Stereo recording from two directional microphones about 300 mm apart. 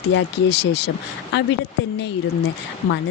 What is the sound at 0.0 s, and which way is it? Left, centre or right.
Speech, left.